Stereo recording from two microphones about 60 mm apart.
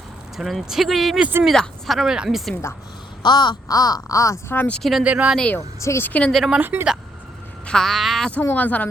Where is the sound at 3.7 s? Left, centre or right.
Left.